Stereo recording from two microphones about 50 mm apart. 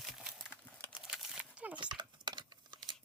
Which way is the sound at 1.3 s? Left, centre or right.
Right.